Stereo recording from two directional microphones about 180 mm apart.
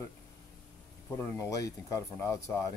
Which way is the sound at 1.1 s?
15° left (ahead or behind).